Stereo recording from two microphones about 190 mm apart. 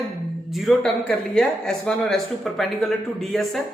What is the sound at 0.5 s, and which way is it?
A man's voice, centre (ahead or behind).